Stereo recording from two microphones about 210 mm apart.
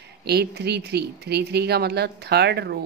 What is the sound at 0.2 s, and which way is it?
Speech, 50° right (ahead or behind).